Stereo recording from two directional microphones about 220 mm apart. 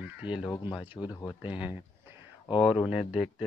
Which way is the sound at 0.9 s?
20° left (ahead or behind).